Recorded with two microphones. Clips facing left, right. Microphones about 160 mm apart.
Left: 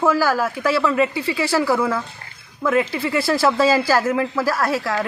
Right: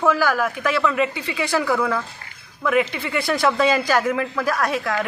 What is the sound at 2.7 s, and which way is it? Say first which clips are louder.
Speech: left 1 dB; 30° left (ahead or behind).